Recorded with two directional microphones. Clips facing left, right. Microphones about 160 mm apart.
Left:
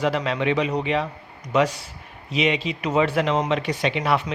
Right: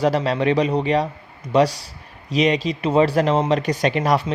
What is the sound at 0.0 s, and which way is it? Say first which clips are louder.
Speech: right 4 dB; 40° right (ahead or behind).